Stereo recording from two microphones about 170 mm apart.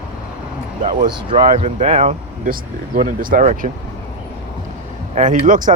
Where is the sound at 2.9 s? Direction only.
55° right (ahead or behind).